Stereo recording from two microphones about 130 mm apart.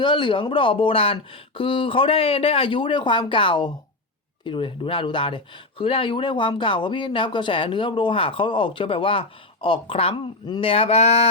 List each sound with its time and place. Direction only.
0.0 s speech: 40° left (ahead or behind)